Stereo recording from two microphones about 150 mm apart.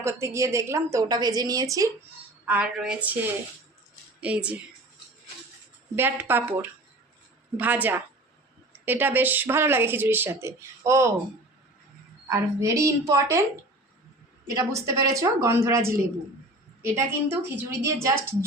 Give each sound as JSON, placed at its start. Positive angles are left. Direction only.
{"t": 0.0, "sound": "a woman's voice", "side_deg": -20}
{"t": 2.5, "sound": "speech", "side_deg": -10}
{"t": 6.0, "sound": "speech", "side_deg": -15}
{"t": 12.3, "sound": "a woman's voice", "side_deg": -20}
{"t": 14.5, "sound": "a woman's voice", "side_deg": -20}